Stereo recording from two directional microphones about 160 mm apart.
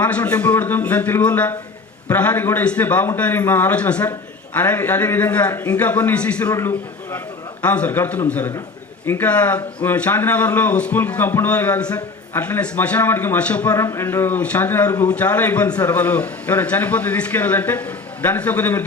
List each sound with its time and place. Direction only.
0.0 s speech: 10° left (ahead or behind)